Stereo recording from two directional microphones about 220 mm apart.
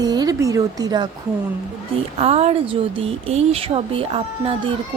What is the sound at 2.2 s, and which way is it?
Speech, 30° right (ahead or behind).